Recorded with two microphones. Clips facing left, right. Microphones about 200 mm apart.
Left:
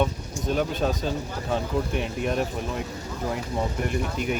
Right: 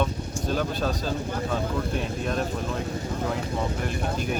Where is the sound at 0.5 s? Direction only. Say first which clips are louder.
Left 2 dB; 20° left (ahead or behind).